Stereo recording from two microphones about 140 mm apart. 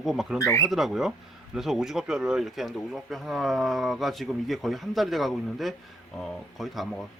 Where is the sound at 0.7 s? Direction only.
Centre (ahead or behind).